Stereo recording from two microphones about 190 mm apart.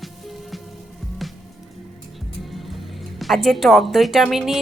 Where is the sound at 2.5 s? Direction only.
Centre (ahead or behind).